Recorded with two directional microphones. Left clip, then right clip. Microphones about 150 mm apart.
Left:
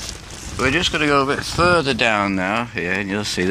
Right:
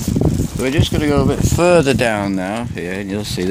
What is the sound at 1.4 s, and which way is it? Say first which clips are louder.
Speech: right 4 dB; 70° right (ahead or behind).